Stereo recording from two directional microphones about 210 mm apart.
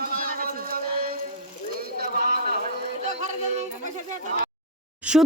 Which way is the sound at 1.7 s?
45° right (ahead or behind).